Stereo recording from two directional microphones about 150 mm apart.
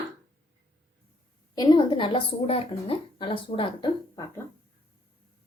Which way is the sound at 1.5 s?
30° left (ahead or behind).